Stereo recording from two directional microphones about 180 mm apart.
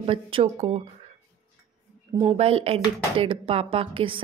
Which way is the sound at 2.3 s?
35° right (ahead or behind).